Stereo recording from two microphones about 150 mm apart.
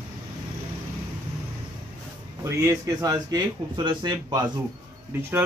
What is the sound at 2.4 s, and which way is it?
Speech, 20° right (ahead or behind).